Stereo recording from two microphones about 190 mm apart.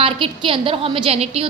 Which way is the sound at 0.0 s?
30° right (ahead or behind).